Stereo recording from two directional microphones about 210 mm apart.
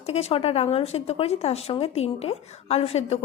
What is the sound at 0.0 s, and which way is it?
Speech, 30° left (ahead or behind).